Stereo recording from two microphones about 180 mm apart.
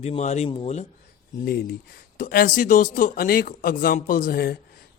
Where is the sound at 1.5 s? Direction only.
60° left (ahead or behind).